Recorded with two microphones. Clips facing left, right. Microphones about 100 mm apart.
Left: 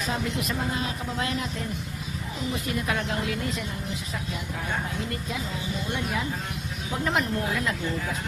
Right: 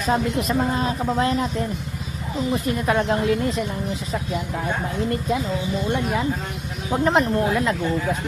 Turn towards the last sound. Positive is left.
turn(degrees=-35)  # may be behind; listen again after turning